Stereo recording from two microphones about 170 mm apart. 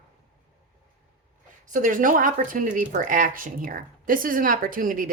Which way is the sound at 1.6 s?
50° right (ahead or behind).